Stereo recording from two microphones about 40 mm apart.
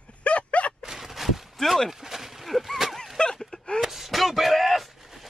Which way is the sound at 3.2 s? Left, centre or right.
Left.